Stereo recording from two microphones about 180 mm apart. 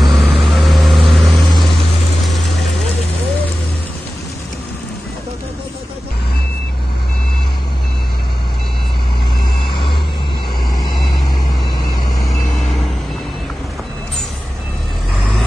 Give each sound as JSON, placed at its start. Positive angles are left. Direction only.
{"t": 0.0, "sound": "vehicle", "side_deg": 0}
{"t": 2.2, "sound": "pump", "side_deg": 0}
{"t": 9.7, "sound": "vehicle", "side_deg": 25}